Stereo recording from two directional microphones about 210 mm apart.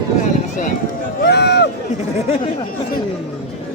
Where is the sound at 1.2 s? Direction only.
55° left (ahead or behind).